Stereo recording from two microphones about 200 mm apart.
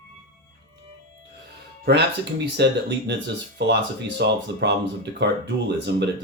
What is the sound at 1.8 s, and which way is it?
Speech, 55° right (ahead or behind).